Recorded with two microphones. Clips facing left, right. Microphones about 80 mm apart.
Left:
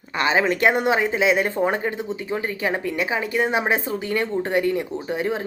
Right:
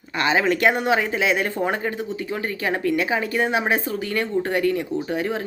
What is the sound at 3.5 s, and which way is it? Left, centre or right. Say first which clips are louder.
A woman's voice: even; left.